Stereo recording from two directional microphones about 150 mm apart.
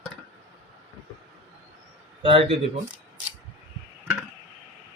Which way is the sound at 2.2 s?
40° right (ahead or behind).